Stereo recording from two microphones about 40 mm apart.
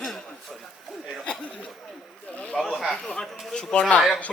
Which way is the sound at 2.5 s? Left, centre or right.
Centre.